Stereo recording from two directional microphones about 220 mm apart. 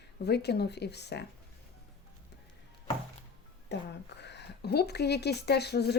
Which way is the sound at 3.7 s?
50° left (ahead or behind).